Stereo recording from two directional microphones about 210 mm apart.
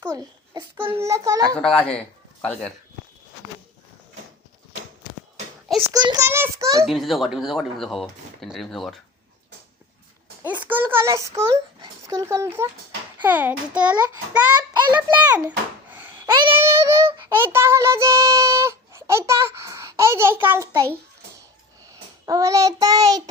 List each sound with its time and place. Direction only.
0.0 s a child's voice: 15° right (ahead or behind)
1.5 s speech: 5° left (ahead or behind)
5.9 s a child's voice: 20° right (ahead or behind)
6.7 s speech: centre (ahead or behind)
10.4 s a child's voice: 10° right (ahead or behind)
15.0 s a sound: 10° right (ahead or behind)
16.2 s a child's voice: 20° right (ahead or behind)
22.3 s a child's voice: 15° right (ahead or behind)